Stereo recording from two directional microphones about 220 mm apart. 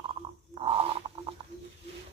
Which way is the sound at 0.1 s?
25° right (ahead or behind).